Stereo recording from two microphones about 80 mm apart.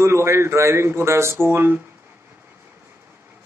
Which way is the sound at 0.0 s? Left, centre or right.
Right.